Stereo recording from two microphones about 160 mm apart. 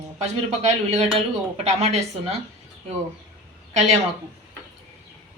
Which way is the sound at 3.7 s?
45° right (ahead or behind).